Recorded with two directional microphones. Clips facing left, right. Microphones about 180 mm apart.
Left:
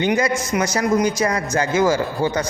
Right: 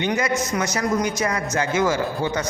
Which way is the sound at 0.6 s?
35° left (ahead or behind).